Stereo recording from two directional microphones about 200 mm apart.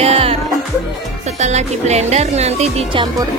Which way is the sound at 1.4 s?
35° right (ahead or behind).